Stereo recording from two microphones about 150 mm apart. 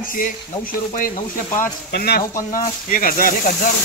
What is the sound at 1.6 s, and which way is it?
Speech, 90° left.